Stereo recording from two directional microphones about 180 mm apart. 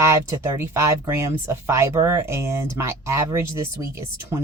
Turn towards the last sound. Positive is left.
turn(degrees=-15)  # may be behind; listen again after turning